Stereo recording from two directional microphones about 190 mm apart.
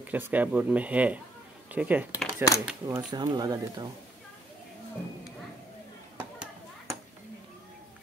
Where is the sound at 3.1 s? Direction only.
20° right (ahead or behind).